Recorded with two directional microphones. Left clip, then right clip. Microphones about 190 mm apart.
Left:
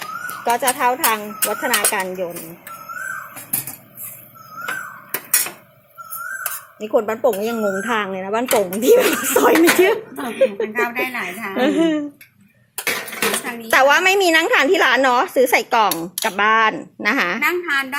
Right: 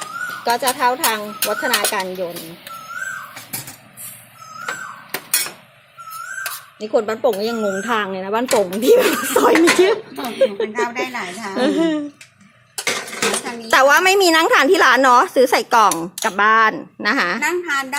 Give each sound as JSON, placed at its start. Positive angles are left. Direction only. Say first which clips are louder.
{"t": 0.5, "sound": "speech", "louder": "even", "side_deg": 5}
{"t": 6.8, "sound": "speech", "louder": "even", "side_deg": 0}
{"t": 10.7, "sound": "a woman's voice", "louder": "left 1 dB", "side_deg": -15}
{"t": 12.8, "sound": "a sound", "louder": "right 1 dB", "side_deg": 15}
{"t": 13.4, "sound": "a woman's voice", "louder": "right 1 dB", "side_deg": -10}
{"t": 17.4, "sound": "a woman's voice", "louder": "left 1 dB", "side_deg": -25}